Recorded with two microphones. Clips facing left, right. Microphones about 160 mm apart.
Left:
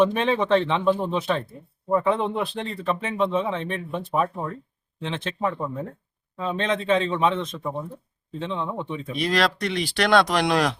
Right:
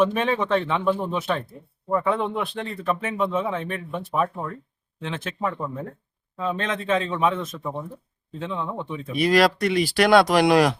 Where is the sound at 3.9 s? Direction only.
Centre (ahead or behind).